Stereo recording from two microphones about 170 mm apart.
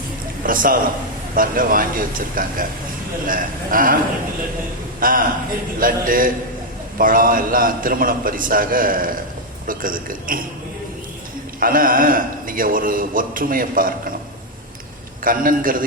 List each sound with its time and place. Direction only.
0.4 s a man's voice: 55° right (ahead or behind)
4.9 s a man's voice: 55° right (ahead or behind)
11.6 s a man's voice: 55° right (ahead or behind)
15.2 s a man's voice: 55° right (ahead or behind)